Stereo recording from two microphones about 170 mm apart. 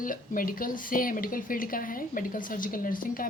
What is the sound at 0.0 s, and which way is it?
A woman's voice, 55° left (ahead or behind).